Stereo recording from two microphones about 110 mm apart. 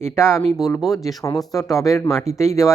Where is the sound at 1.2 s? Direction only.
35° left (ahead or behind).